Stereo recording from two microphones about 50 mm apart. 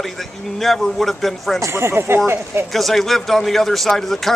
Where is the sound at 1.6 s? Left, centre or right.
Right.